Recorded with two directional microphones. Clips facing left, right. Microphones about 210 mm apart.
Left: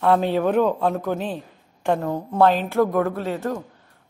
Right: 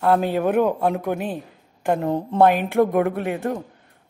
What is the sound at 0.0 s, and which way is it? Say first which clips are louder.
A woman's voice: even; 5° right (ahead or behind).